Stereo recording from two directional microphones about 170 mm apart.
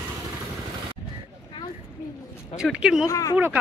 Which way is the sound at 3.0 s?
20° left (ahead or behind).